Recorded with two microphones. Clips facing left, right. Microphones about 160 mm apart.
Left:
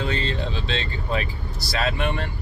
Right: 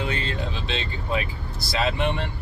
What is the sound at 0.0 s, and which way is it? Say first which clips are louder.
Speech: left 2 dB; 10° right (ahead or behind).